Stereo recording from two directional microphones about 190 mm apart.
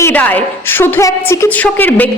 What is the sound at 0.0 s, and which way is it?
A woman's voice, 10° left (ahead or behind).